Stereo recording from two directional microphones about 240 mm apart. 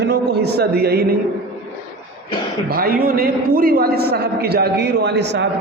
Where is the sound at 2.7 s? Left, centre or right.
Right.